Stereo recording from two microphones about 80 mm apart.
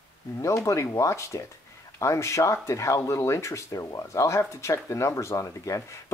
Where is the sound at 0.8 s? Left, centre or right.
Left.